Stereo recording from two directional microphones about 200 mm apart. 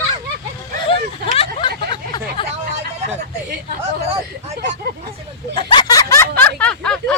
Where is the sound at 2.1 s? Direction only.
20° left (ahead or behind).